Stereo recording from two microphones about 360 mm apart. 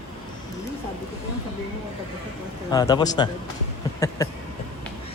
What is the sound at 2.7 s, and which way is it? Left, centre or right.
Speech, centre.